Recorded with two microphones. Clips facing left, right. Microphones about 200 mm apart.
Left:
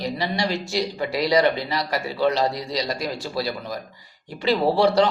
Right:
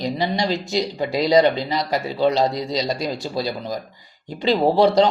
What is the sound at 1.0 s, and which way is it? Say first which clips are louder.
Speech: right 4 dB; 25° right (ahead or behind).